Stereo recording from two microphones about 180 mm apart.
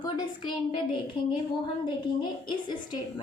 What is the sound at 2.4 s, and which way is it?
Speech, 25° left (ahead or behind).